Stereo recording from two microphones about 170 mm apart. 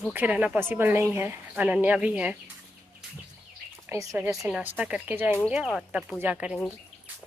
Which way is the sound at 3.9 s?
15° right (ahead or behind).